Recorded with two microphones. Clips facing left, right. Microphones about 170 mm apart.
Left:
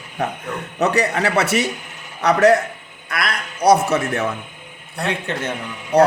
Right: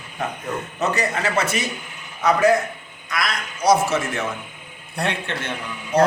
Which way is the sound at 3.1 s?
60° left (ahead or behind).